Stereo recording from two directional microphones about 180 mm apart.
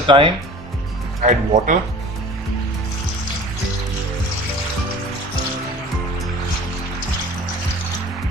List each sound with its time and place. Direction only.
0.1 s speech: 30° right (ahead or behind)
1.2 s speech: 45° right (ahead or behind)